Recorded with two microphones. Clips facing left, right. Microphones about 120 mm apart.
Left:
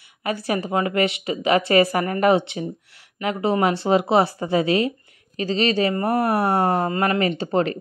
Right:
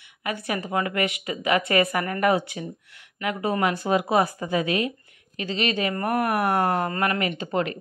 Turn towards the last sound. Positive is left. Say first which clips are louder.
# left 5 dB
turn(degrees=35)  # may be behind; listen again after turning